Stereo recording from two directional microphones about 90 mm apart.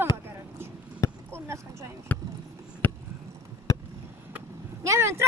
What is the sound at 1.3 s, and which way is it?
Speech, 30° right (ahead or behind).